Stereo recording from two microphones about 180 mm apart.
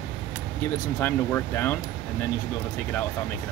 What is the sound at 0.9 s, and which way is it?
Speech, 10° left (ahead or behind).